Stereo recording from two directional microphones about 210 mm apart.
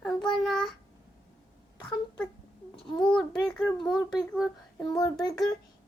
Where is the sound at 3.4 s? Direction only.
5° left (ahead or behind).